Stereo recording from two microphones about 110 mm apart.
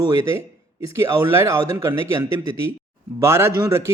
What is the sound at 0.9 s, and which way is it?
Speech, 25° right (ahead or behind).